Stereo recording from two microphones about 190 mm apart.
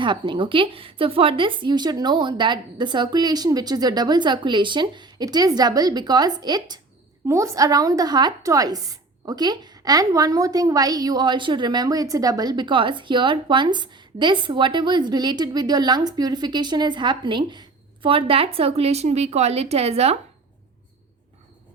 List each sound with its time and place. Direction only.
0.0 s a woman's voice: 25° right (ahead or behind)